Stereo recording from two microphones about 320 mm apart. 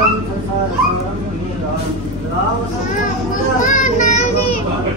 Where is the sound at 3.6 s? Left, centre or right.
Left.